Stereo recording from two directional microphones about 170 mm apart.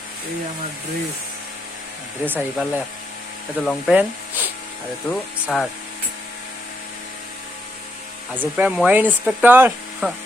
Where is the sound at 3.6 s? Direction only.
5° left (ahead or behind).